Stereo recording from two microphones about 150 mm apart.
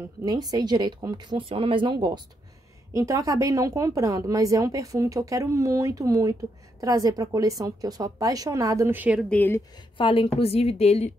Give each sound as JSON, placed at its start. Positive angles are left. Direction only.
{"t": 0.2, "sound": "speech", "side_deg": -25}
{"t": 9.3, "sound": "a woman's voice", "side_deg": 10}
{"t": 9.9, "sound": "a woman's voice", "side_deg": 35}